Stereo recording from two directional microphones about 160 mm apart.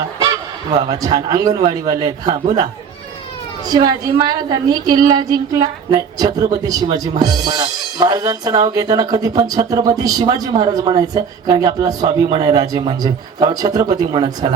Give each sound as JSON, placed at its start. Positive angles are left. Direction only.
{"t": 0.8, "sound": "speech", "side_deg": -20}
{"t": 3.7, "sound": "speech", "side_deg": -25}
{"t": 12.0, "sound": "a man's voice", "side_deg": -40}
{"t": 12.5, "sound": "speech", "side_deg": -25}